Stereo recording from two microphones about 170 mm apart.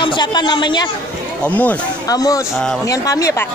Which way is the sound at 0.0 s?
30° left (ahead or behind).